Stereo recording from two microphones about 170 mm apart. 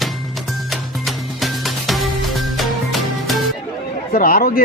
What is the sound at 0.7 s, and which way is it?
Music, centre (ahead or behind).